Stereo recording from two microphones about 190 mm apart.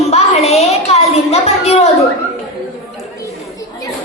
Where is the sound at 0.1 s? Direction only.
35° left (ahead or behind).